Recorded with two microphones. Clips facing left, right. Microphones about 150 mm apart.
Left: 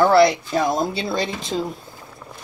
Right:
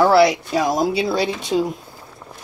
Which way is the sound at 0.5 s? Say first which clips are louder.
Right 2 dB; 10° right (ahead or behind).